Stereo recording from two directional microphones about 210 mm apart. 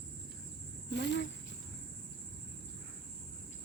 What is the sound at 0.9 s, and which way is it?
Cricket, 55° left (ahead or behind).